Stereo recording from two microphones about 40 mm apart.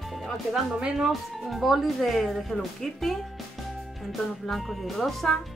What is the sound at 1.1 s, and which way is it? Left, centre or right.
Speech, centre.